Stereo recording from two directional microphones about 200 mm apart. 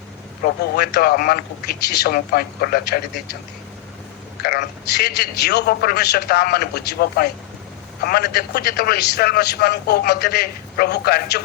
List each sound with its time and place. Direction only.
0.4 s a man's voice: 50° left (ahead or behind)
4.4 s a man's voice: 55° left (ahead or behind)